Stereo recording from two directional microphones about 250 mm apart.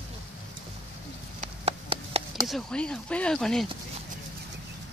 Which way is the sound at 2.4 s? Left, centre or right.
Centre.